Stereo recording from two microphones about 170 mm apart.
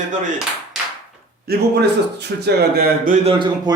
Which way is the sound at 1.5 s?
75° right (ahead or behind).